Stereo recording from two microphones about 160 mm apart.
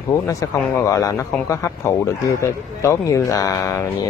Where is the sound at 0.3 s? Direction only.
20° left (ahead or behind).